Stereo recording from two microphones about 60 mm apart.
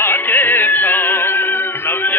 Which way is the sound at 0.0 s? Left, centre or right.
Left.